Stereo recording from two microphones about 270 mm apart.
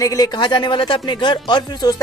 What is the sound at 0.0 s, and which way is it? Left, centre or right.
Speech, centre.